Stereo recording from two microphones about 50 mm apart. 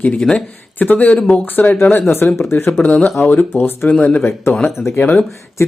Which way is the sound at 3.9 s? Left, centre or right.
Left.